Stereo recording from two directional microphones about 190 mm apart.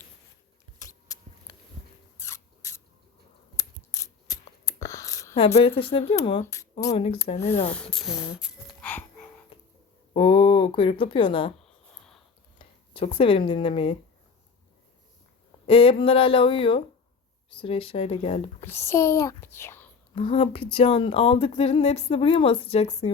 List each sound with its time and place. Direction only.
0.8 s a sound: 20° left (ahead or behind)
2.1 s mouse: 15° left (ahead or behind)
3.6 s mechanisms: 15° left (ahead or behind)
5.5 s speech: 30° left (ahead or behind)
6.4 s speech: 15° left (ahead or behind)
6.9 s speech: 30° left (ahead or behind)
7.7 s speech: 5° left (ahead or behind)
8.9 s music: 10° left (ahead or behind)
10.2 s speech: 30° left (ahead or behind)
11.6 s a sound: 5° left (ahead or behind)
12.5 s speech: 30° left (ahead or behind)
15.6 s speech: 30° left (ahead or behind)
18.6 s a child's voice: 10° left (ahead or behind)
20.1 s speech: 35° left (ahead or behind)